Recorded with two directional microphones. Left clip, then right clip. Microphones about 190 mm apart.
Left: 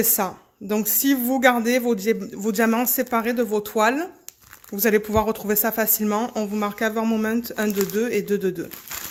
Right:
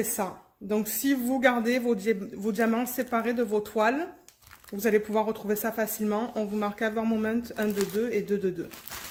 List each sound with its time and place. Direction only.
0.2 s a man's voice: 40° left (ahead or behind)